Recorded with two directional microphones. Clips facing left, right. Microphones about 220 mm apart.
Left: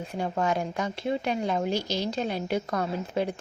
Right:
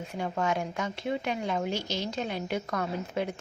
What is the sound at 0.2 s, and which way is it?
A woman's voice, 35° left (ahead or behind).